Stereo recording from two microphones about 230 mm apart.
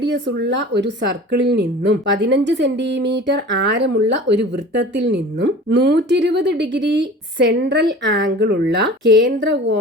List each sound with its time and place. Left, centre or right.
0.0 s speech: right